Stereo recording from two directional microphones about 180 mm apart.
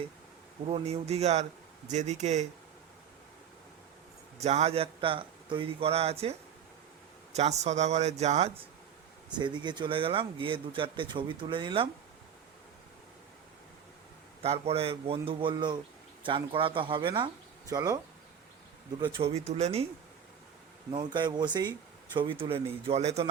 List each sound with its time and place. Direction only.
0.6 s a man's voice: 35° right (ahead or behind)
4.4 s a man's voice: 35° right (ahead or behind)
7.3 s a man's voice: 40° right (ahead or behind)
9.4 s speech: 25° right (ahead or behind)
14.4 s a man's voice: 35° right (ahead or behind)
20.9 s a man's voice: 25° right (ahead or behind)